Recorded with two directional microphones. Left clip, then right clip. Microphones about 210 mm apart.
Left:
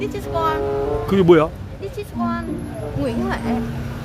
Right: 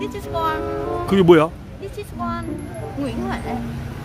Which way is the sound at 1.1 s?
15° right (ahead or behind).